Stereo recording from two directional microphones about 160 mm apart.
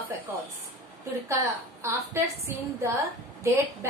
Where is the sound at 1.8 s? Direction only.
15° right (ahead or behind).